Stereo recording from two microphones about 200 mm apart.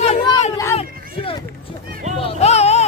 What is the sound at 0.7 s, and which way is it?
Hubbub, 25° left (ahead or behind).